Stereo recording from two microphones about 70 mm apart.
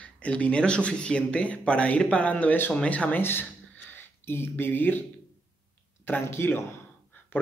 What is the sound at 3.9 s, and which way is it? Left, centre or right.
Speech, left.